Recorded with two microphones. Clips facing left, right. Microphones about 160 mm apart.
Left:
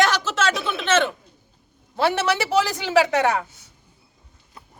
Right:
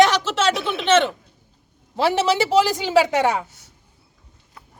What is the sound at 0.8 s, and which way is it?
A woman's voice, 30° right (ahead or behind).